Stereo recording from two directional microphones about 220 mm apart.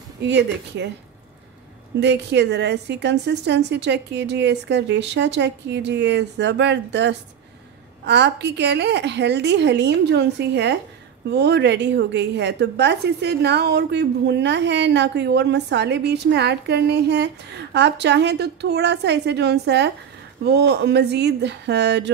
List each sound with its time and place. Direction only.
0.3 s a woman's voice: 50° right (ahead or behind)
2.0 s a woman's voice: 50° right (ahead or behind)